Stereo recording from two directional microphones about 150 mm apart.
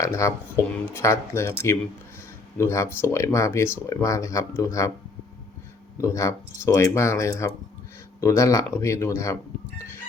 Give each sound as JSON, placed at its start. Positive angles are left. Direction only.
{"t": 0.0, "sound": "speech", "side_deg": 20}
{"t": 6.0, "sound": "speech", "side_deg": 20}